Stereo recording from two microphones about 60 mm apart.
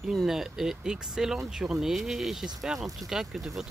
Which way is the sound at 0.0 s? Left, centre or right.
Centre.